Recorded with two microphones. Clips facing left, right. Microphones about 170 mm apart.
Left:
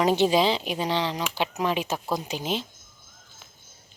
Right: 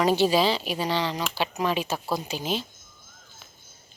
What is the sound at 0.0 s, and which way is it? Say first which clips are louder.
A woman's voice: even; 20° left (ahead or behind).